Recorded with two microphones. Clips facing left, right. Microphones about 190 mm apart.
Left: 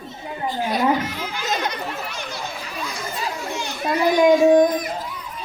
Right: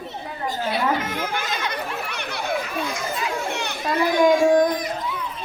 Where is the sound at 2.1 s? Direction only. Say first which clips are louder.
Right 5 dB; 60° right (ahead or behind).